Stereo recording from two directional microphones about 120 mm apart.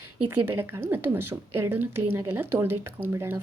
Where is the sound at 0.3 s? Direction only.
20° right (ahead or behind).